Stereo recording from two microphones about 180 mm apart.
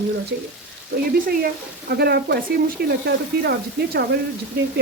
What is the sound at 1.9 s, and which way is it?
Speech, 65° right (ahead or behind).